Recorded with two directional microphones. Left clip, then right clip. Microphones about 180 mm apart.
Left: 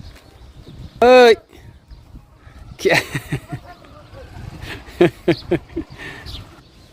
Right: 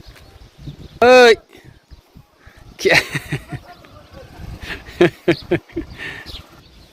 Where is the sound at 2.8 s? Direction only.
10° left (ahead or behind).